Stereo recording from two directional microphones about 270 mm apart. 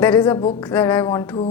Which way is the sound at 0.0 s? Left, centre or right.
Centre.